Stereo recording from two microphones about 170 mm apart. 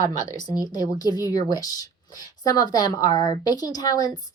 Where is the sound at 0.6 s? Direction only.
20° left (ahead or behind).